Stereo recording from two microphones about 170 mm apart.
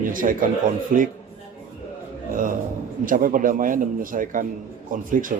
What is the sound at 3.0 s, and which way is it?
Speech, 55° right (ahead or behind).